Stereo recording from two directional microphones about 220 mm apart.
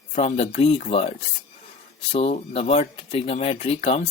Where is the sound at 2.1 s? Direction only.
25° left (ahead or behind).